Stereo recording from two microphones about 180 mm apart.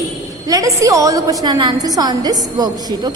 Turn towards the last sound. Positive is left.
turn(degrees=-20)  # may be behind; listen again after turning